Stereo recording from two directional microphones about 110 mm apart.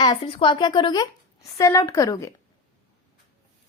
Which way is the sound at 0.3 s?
60° left (ahead or behind).